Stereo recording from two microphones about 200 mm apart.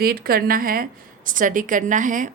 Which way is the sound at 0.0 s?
50° right (ahead or behind).